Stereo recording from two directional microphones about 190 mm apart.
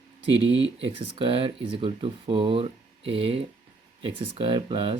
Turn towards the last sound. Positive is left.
turn(degrees=-25)  # may be behind; listen again after turning